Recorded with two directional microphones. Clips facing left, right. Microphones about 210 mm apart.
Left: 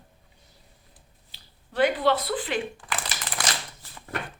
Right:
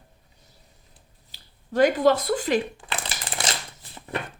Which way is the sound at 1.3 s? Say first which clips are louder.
Right 10 dB; 45° right (ahead or behind).